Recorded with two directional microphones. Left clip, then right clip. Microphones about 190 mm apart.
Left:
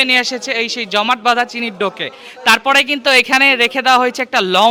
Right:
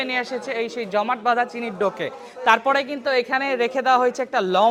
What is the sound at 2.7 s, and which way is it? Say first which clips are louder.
A man's voice: left 9 dB; 35° left (ahead or behind).